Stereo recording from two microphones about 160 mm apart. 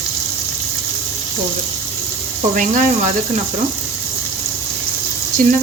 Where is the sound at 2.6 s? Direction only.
50° right (ahead or behind).